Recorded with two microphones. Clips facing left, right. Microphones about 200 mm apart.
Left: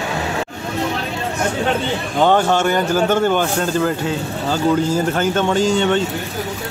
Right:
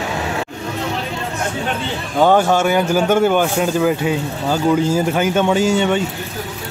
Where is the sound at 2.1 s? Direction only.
10° right (ahead or behind).